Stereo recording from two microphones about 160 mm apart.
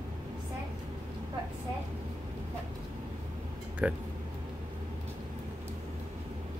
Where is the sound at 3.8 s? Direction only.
10° right (ahead or behind).